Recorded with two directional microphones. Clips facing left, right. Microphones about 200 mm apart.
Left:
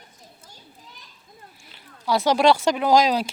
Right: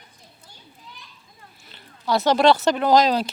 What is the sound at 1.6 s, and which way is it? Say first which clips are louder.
Speech: even; 10° left (ahead or behind).